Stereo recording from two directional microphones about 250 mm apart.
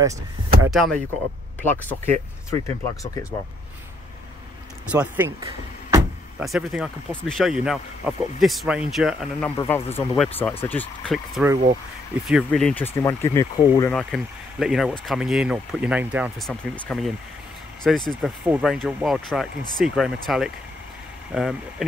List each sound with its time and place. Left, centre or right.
0.0 s speech: centre
0.7 s speech: centre
4.9 s speech: centre
6.4 s speech: centre
9.6 s speech: centre